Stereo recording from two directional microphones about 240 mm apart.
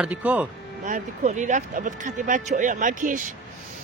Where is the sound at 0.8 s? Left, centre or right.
Right.